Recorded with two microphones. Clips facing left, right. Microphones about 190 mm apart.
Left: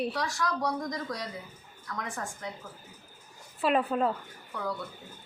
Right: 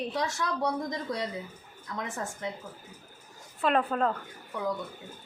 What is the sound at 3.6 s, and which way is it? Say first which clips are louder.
Speech: even; 5° left (ahead or behind).